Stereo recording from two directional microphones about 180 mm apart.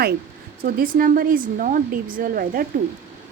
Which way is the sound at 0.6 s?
50° right (ahead or behind).